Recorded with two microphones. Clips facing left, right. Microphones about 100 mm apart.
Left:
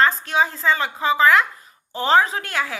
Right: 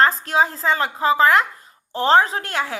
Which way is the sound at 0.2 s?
35° right (ahead or behind).